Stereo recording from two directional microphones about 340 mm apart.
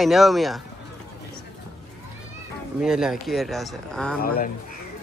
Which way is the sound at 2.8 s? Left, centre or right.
Centre.